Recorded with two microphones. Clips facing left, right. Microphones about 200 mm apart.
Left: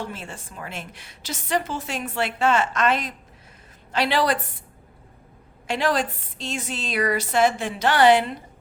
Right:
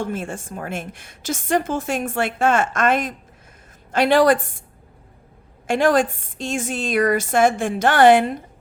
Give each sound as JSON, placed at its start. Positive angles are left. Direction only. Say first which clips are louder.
{"t": 0.0, "sound": "a woman's voice", "louder": "right 7 dB", "side_deg": -50}
{"t": 5.6, "sound": "a woman's voice", "louder": "right 6 dB", "side_deg": -50}